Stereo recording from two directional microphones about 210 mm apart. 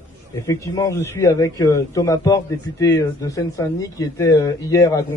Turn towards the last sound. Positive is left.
turn(degrees=15)  # may be behind; listen again after turning